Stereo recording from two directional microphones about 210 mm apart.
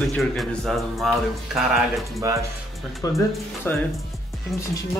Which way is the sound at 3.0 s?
15° left (ahead or behind).